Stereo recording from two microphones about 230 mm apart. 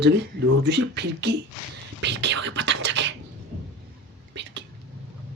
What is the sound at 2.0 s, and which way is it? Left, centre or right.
Scratch, right.